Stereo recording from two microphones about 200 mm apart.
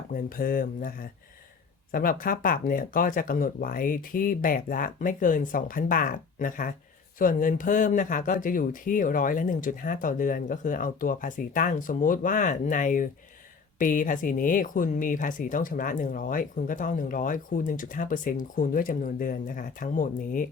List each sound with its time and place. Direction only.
0.1 s speech: 45° left (ahead or behind)